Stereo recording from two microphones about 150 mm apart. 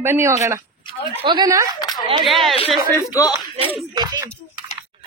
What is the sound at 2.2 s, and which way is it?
Speech, centre (ahead or behind).